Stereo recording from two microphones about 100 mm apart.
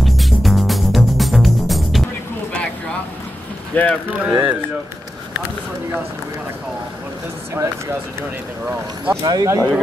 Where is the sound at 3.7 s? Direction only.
15° left (ahead or behind).